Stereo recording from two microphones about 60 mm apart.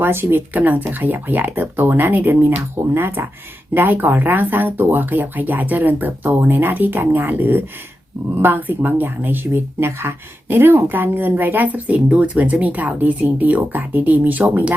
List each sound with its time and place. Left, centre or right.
0.0 s speech: right